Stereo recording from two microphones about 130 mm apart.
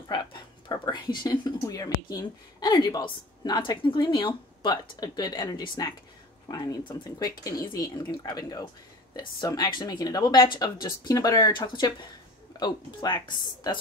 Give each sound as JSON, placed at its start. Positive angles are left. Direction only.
{"t": 0.1, "sound": "speech", "side_deg": 35}